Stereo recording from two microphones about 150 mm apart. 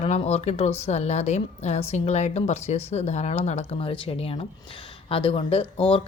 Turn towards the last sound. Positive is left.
turn(degrees=40)  # may be behind; listen again after turning